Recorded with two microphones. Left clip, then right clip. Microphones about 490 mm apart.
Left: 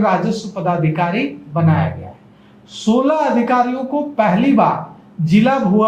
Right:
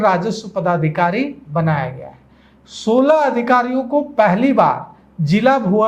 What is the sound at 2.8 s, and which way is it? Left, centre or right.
Speech, right.